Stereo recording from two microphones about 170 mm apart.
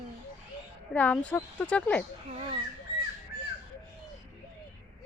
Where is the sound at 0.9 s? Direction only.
10° left (ahead or behind).